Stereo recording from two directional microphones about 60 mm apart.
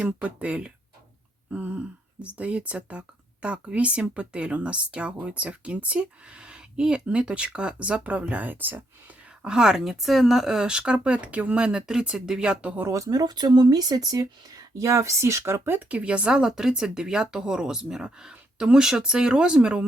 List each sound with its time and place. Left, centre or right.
0.0 s speech: right
9.4 s speech: centre
12.9 s speech: right
13.7 s speech: right
15.9 s speech: right